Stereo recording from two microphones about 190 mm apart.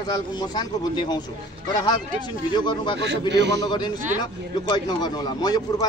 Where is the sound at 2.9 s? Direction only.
65° right (ahead or behind).